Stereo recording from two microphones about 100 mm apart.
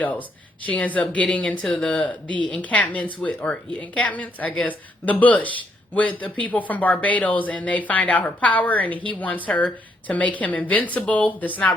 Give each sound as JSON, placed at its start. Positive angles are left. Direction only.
{"t": 0.0, "sound": "a woman's voice", "side_deg": 15}